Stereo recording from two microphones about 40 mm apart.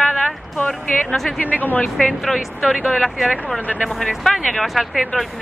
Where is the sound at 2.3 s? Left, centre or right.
Centre.